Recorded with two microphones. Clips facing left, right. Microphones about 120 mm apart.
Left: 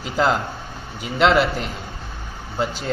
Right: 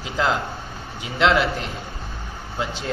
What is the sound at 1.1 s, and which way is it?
Speech, centre (ahead or behind).